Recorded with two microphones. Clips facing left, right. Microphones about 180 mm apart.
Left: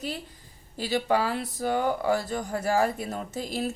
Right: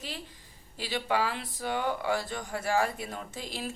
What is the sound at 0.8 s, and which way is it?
Speech, 40° left (ahead or behind).